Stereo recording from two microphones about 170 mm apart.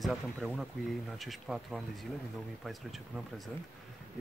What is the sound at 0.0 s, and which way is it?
Speech, centre (ahead or behind).